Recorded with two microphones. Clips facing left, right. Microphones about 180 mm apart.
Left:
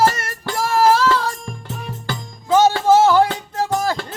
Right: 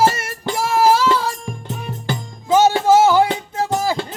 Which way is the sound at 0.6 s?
5° right (ahead or behind).